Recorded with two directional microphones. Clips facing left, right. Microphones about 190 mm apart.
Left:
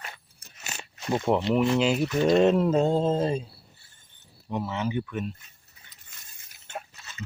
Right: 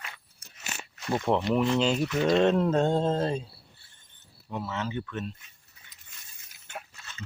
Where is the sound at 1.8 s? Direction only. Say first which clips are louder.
Left 2 dB; 5° left (ahead or behind).